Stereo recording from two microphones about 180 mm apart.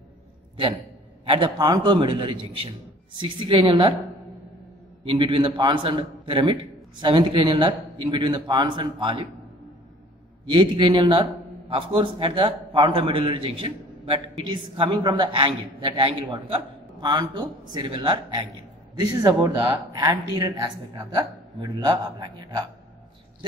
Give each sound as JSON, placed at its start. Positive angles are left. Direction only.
{"t": 1.2, "sound": "a man's voice", "side_deg": -30}
{"t": 5.0, "sound": "a man's voice", "side_deg": -30}
{"t": 10.5, "sound": "a man's voice", "side_deg": -30}